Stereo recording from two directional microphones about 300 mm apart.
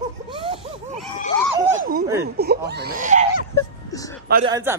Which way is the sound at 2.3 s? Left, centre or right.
Right.